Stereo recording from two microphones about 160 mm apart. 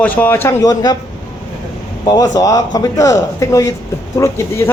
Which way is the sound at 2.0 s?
20° left (ahead or behind).